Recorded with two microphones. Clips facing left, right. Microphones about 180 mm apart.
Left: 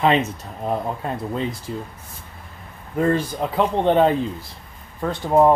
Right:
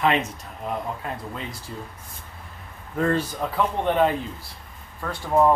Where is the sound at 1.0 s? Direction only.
35° left (ahead or behind).